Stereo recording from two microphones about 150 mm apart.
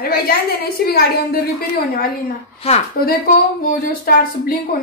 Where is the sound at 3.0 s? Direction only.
80° left.